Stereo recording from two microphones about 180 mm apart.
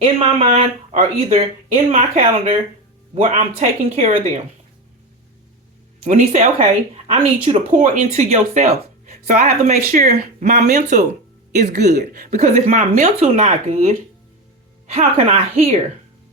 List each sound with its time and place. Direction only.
0.0 s speech: 35° right (ahead or behind)
6.0 s speech: 40° right (ahead or behind)
14.9 s speech: 35° right (ahead or behind)